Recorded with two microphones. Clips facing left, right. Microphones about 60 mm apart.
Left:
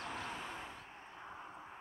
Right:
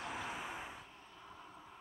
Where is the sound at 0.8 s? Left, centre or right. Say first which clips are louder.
Left 4 dB; left.